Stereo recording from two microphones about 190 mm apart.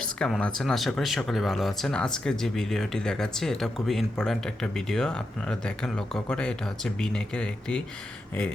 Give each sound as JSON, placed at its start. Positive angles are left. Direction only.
{"t": 0.0, "sound": "speech", "side_deg": 5}